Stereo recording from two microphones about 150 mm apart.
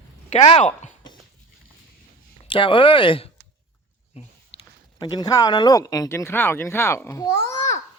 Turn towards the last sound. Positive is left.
turn(degrees=20)  # may be behind; listen again after turning